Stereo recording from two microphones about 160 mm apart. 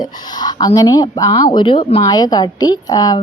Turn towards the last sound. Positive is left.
turn(degrees=25)  # may be behind; listen again after turning